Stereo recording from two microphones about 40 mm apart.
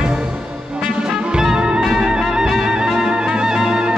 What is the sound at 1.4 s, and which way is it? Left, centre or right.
Music, centre.